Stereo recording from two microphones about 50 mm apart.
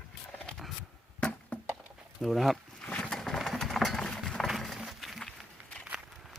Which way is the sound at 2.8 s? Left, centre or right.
Left.